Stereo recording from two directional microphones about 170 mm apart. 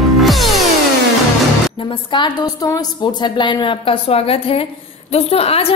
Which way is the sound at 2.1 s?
25° left (ahead or behind).